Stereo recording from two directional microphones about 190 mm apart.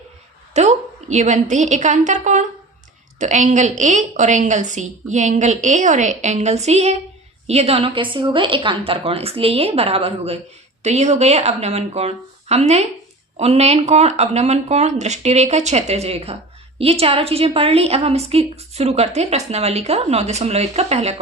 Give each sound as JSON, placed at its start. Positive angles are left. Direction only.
{"t": 0.5, "sound": "speech", "side_deg": -35}